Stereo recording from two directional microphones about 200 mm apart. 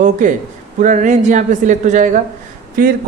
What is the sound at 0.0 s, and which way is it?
A man's voice, 40° right (ahead or behind).